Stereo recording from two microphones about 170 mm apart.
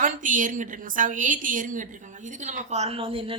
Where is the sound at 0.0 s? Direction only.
50° right (ahead or behind).